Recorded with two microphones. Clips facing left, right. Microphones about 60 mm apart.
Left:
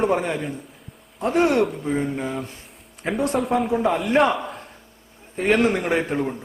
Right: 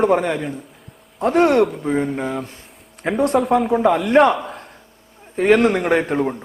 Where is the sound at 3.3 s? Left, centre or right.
Right.